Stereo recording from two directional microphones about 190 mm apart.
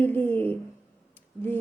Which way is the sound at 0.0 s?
10° left (ahead or behind).